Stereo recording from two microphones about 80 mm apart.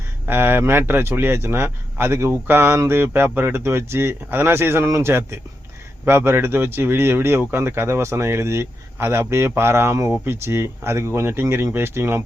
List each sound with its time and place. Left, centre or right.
0.3 s speech: right